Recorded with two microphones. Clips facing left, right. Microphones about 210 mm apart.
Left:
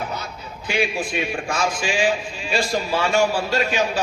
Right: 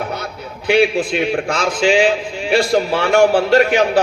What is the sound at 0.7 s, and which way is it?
A man's voice, 70° right (ahead or behind).